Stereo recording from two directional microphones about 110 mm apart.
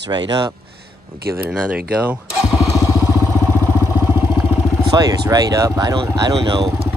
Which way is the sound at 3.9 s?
20° right (ahead or behind).